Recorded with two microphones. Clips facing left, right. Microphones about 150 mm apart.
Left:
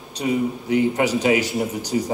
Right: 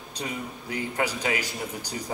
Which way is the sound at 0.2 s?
20° left (ahead or behind).